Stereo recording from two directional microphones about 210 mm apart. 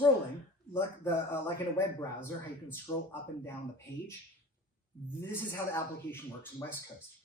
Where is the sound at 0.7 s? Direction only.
10° left (ahead or behind).